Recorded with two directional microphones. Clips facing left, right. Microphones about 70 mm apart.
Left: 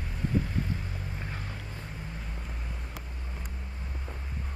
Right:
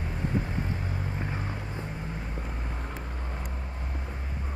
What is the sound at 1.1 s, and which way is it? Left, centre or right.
Music, right.